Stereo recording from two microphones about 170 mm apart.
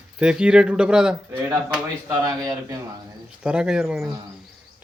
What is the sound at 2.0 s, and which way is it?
Speech, 20° right (ahead or behind).